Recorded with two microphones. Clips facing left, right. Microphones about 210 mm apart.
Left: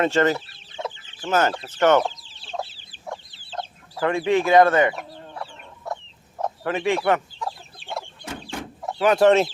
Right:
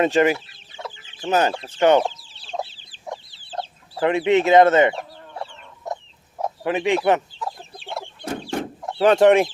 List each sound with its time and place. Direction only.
0.0 s speech: 15° right (ahead or behind)
2.5 s chicken: 20° right (ahead or behind)
6.4 s speech: 15° right (ahead or behind)
7.4 s chicken: 5° right (ahead or behind)
9.0 s speech: 30° right (ahead or behind)
9.2 s speech: 15° right (ahead or behind)